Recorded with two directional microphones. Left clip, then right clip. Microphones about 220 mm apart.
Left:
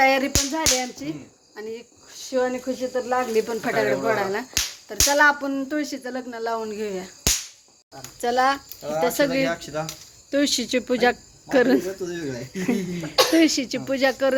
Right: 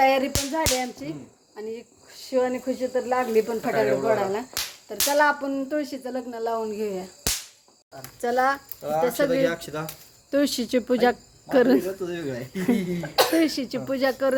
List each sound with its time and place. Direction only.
0.0 s speech: 5° left (ahead or behind)
8.2 s speech: 15° left (ahead or behind)
9.4 s speech: 55° right (ahead or behind)
10.3 s speech: 10° right (ahead or behind)
13.1 s speech: 5° left (ahead or behind)